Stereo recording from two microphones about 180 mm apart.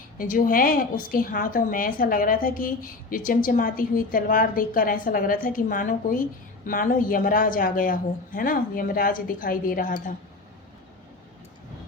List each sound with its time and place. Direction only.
0.2 s a woman's voice: 50° left (ahead or behind)